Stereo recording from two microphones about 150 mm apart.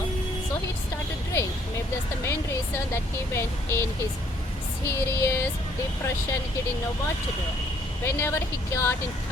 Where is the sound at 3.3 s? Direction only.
20° left (ahead or behind).